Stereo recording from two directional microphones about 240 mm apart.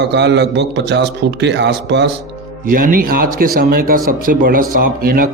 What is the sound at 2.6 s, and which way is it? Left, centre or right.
Speech, right.